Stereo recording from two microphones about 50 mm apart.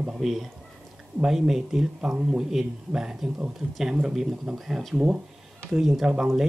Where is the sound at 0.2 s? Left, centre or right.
Centre.